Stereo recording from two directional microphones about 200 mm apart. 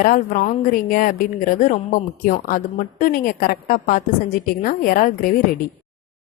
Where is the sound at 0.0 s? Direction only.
40° left (ahead or behind).